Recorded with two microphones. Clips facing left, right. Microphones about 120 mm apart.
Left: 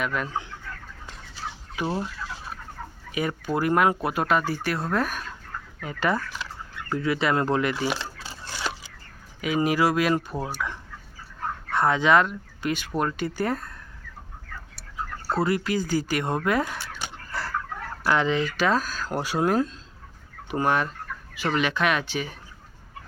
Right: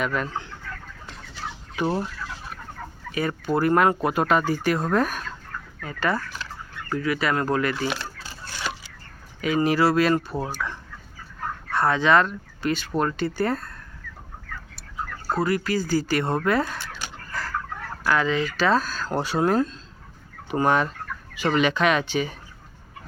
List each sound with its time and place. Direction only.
0.0 s speech: 5° left (ahead or behind)
1.8 s fowl: 10° right (ahead or behind)
3.1 s speech: 10° left (ahead or behind)
5.8 s speech: 20° left (ahead or behind)
9.4 s speech: 10° left (ahead or behind)
15.4 s speech: 25° left (ahead or behind)
18.1 s speech: 20° left (ahead or behind); by 22.4 s centre (ahead or behind)